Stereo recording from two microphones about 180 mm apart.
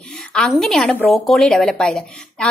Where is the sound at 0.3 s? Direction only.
5° left (ahead or behind).